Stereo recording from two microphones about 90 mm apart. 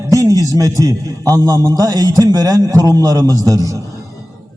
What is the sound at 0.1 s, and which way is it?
A man's voice, 40° right (ahead or behind).